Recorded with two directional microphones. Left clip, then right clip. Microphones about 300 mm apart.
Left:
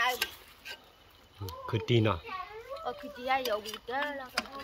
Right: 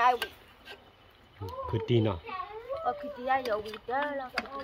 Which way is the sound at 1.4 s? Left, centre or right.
Centre.